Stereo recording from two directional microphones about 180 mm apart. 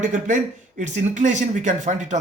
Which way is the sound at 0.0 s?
45° right (ahead or behind).